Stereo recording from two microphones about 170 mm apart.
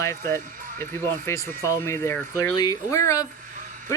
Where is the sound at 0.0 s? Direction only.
15° left (ahead or behind).